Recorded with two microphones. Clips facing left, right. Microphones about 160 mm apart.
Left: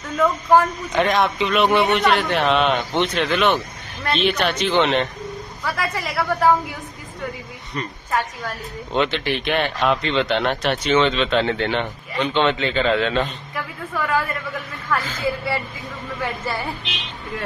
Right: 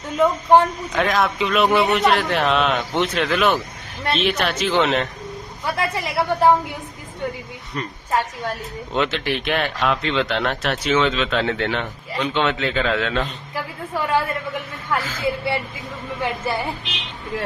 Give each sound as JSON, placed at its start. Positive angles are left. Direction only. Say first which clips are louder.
{"t": 0.2, "sound": "a woman's voice", "louder": "right 1 dB", "side_deg": -25}
{"t": 0.9, "sound": "speech", "louder": "left 2 dB", "side_deg": 0}
{"t": 5.6, "sound": "a woman's voice", "louder": "right 2 dB", "side_deg": -25}
{"t": 8.9, "sound": "speech", "louder": "left 1 dB", "side_deg": 0}
{"t": 13.6, "sound": "a woman's voice", "louder": "right 1 dB", "side_deg": -30}
{"t": 16.2, "sound": "a woman's voice", "louder": "right 3 dB", "side_deg": -20}